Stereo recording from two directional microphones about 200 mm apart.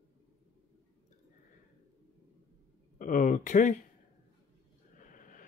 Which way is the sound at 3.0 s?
40° left (ahead or behind).